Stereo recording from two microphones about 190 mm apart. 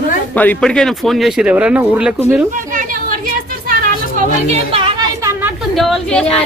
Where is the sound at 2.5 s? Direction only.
45° right (ahead or behind).